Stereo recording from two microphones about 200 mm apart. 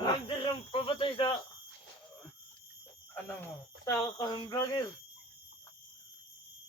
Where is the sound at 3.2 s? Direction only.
10° left (ahead or behind).